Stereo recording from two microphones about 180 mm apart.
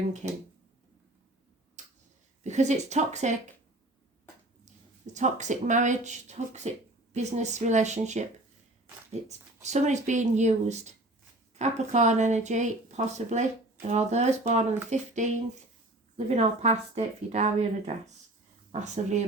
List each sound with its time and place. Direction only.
0.2 s speech: 40° right (ahead or behind)
1.8 s tick-tock: 40° right (ahead or behind)
2.4 s speech: 40° right (ahead or behind)
5.1 s speech: 40° right (ahead or behind)
9.6 s speech: 40° right (ahead or behind)